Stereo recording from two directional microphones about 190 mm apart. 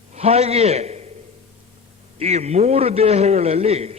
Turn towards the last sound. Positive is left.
turn(degrees=-35)  # may be behind; listen again after turning